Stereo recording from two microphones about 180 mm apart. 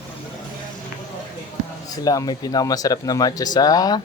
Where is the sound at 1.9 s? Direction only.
20° left (ahead or behind).